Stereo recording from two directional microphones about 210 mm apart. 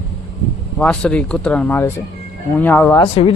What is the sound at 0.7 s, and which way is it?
Speech, 5° left (ahead or behind).